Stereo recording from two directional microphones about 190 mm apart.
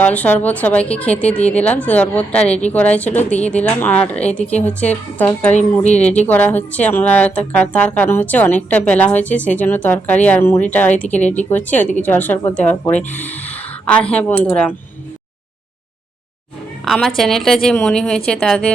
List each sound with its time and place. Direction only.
0.0 s speech: 5° left (ahead or behind)
5.8 s speech: 35° left (ahead or behind)
6.1 s speech: 10° left (ahead or behind)
16.8 s a woman's voice: centre (ahead or behind)